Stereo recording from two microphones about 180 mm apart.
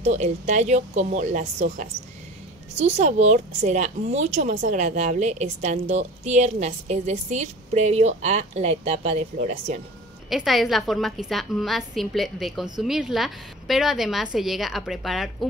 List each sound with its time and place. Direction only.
0.0 s a woman's voice: 40° right (ahead or behind)
2.8 s a woman's voice: 40° right (ahead or behind)
10.3 s a woman's voice: centre (ahead or behind)